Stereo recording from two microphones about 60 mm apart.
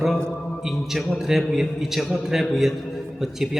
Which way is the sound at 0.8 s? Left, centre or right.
Centre.